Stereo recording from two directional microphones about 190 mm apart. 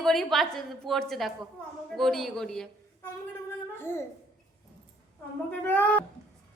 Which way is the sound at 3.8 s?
10° left (ahead or behind).